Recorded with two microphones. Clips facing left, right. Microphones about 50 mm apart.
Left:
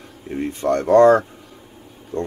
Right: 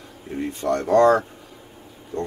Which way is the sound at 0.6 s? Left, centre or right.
Left.